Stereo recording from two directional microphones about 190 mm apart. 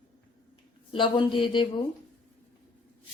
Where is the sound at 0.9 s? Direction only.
25° left (ahead or behind).